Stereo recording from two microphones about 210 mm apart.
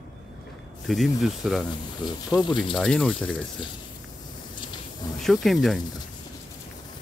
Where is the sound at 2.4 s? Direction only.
20° left (ahead or behind).